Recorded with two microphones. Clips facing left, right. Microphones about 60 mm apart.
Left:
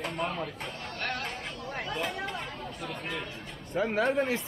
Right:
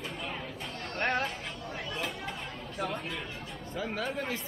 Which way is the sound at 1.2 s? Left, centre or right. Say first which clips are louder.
Even; left.